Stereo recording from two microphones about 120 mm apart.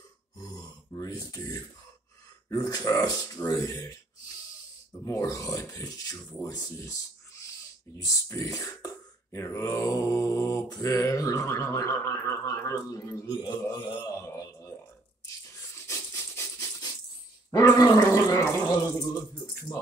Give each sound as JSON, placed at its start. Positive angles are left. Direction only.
{"t": 0.4, "sound": "grunt", "side_deg": 30}
{"t": 2.5, "sound": "speech", "side_deg": 30}
{"t": 5.0, "sound": "speech", "side_deg": 25}
{"t": 13.7, "sound": "speech", "side_deg": 40}
{"t": 14.2, "sound": "mantra", "side_deg": 30}
{"t": 15.9, "sound": "a sound", "side_deg": 25}
{"t": 17.5, "sound": "gargling", "side_deg": 30}